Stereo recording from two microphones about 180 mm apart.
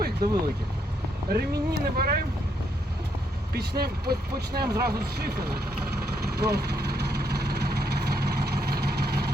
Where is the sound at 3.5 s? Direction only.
60° right (ahead or behind).